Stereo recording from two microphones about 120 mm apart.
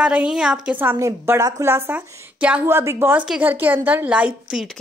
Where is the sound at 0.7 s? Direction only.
15° right (ahead or behind).